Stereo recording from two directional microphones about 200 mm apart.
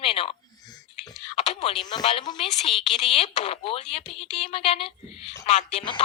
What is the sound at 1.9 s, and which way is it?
Speech, 25° left (ahead or behind).